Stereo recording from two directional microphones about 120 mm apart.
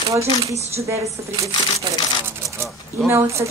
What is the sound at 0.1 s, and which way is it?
Speech, 25° right (ahead or behind).